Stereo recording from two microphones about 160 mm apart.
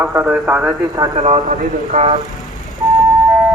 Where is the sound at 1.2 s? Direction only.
50° right (ahead or behind).